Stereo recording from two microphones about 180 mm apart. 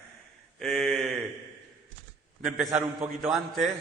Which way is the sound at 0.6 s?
Centre (ahead or behind).